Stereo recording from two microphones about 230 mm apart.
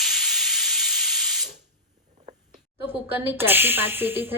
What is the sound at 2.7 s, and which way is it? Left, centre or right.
Speech, centre.